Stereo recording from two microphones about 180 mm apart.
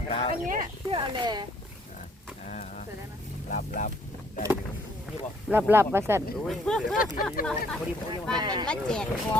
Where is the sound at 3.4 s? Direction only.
45° left (ahead or behind).